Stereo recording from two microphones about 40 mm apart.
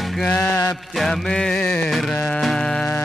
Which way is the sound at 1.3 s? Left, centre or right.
Left.